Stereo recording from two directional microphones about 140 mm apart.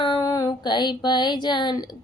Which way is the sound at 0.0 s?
30° left (ahead or behind).